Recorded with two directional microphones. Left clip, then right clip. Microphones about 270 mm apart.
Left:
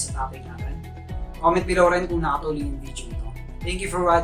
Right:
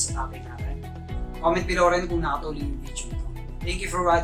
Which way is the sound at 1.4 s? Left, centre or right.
Centre.